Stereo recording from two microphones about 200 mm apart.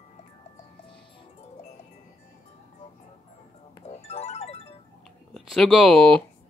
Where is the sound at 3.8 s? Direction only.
30° left (ahead or behind).